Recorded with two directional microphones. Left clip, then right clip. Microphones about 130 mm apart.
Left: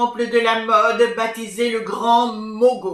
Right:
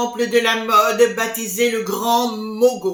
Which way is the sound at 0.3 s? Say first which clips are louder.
Right 1 dB; 15° right (ahead or behind).